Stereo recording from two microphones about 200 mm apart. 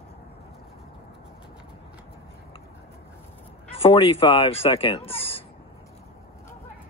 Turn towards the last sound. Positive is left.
turn(degrees=30)  # may be behind; listen again after turning